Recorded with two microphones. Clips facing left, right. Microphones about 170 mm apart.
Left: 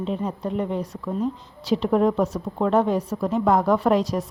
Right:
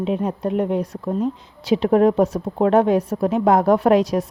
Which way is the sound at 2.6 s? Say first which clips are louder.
Right 5 dB; 65° right (ahead or behind).